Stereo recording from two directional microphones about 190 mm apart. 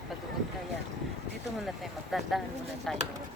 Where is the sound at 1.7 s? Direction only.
Centre (ahead or behind).